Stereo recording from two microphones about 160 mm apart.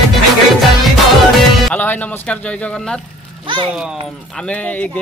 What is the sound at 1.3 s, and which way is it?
Music, centre (ahead or behind).